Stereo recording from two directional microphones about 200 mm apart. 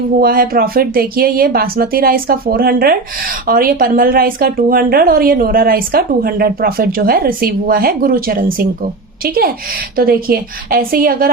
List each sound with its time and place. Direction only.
0.2 s a woman's voice: 45° right (ahead or behind)